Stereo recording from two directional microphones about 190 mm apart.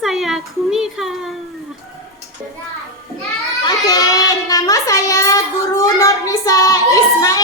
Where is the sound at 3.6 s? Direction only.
20° left (ahead or behind).